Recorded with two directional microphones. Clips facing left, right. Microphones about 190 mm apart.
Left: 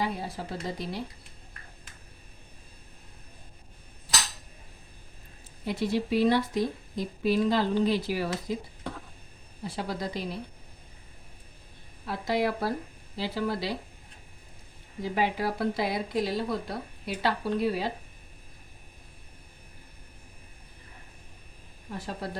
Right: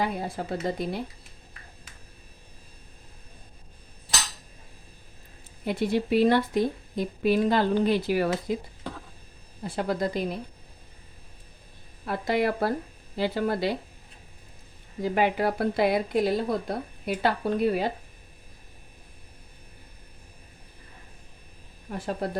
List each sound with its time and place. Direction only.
0.0 s speech: 50° right (ahead or behind)
5.6 s a woman's voice: 55° right (ahead or behind)
9.6 s speech: 50° right (ahead or behind)
12.0 s a woman's voice: 55° right (ahead or behind)
15.0 s a woman's voice: 55° right (ahead or behind)
21.9 s speech: 50° right (ahead or behind)